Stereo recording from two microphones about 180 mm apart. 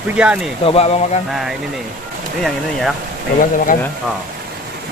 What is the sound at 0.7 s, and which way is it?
Speech, 35° left (ahead or behind).